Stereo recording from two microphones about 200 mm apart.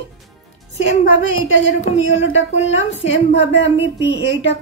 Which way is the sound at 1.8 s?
35° left (ahead or behind).